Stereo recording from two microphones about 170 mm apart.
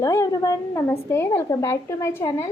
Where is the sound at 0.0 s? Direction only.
20° left (ahead or behind).